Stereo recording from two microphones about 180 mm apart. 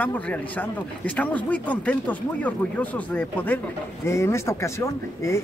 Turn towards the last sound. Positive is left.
turn(degrees=15)  # may be behind; listen again after turning